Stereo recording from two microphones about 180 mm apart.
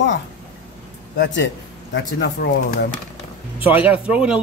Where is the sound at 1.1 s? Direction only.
75° left (ahead or behind).